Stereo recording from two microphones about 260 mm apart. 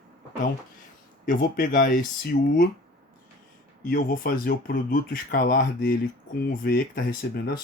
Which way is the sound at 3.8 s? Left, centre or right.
Left.